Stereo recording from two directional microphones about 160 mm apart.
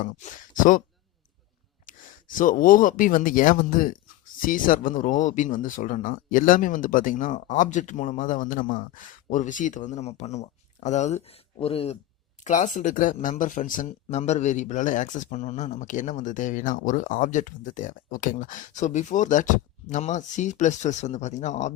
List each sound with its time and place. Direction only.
0.0 s speech: 55° left (ahead or behind)
1.9 s a man's voice: 55° left (ahead or behind); by 11.9 s 40° left (ahead or behind)
12.5 s a man's voice: 50° left (ahead or behind)